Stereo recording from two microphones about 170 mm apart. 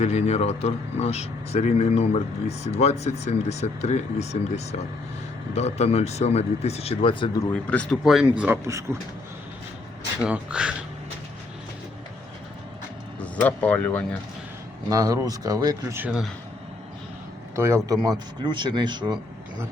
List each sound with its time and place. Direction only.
0.0 s speech: 40° left (ahead or behind)
7.5 s speech: 5° left (ahead or behind); by 8.8 s 15° right (ahead or behind)
10.2 s speech: 5° right (ahead or behind)
13.1 s speech: 10° left (ahead or behind)
14.8 s speech: 20° right (ahead or behind)
17.5 s a man's voice: 15° right (ahead or behind)